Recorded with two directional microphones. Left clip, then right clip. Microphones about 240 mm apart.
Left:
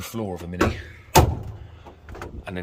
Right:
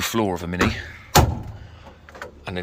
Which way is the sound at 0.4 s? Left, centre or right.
Centre.